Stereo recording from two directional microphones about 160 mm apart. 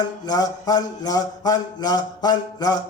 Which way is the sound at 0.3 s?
25° left (ahead or behind).